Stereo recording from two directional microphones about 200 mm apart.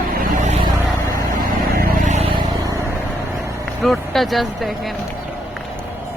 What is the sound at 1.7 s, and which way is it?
Vehicle, 40° right (ahead or behind).